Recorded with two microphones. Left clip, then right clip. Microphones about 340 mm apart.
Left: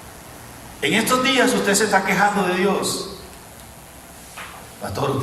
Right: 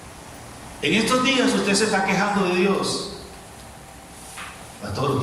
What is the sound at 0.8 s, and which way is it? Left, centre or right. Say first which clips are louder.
A man's voice: left 2 dB; left.